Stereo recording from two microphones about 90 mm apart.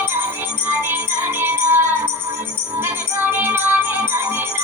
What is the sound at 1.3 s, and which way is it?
Music, 25° right (ahead or behind).